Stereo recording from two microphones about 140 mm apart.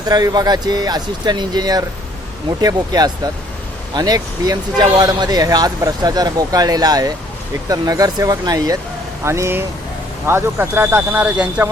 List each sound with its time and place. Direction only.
0.1 s speech: 30° right (ahead or behind); by 11.7 s 10° right (ahead or behind)